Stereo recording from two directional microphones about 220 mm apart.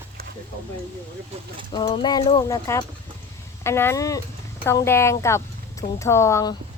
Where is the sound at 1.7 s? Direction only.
20° left (ahead or behind).